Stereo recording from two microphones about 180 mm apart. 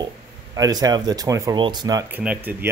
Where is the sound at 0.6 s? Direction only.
20° right (ahead or behind).